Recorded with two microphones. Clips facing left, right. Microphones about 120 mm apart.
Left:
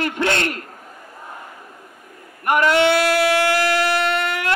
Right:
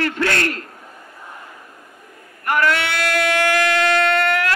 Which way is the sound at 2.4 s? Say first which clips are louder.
Left 4 dB; 20° left (ahead or behind).